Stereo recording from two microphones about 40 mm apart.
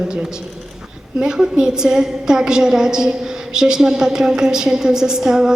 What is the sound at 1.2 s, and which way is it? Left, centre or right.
A woman's voice, centre.